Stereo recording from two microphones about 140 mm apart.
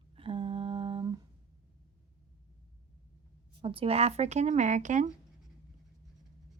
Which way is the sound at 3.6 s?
40° right (ahead or behind).